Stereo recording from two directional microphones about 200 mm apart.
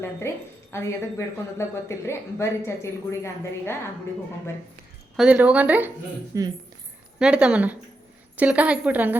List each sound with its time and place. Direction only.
0.2 s speech: 15° left (ahead or behind)
5.1 s a woman's voice: 5° right (ahead or behind)
7.2 s a woman's voice: 5° right (ahead or behind)